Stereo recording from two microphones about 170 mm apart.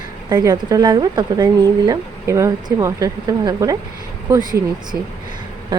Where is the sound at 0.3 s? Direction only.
25° right (ahead or behind).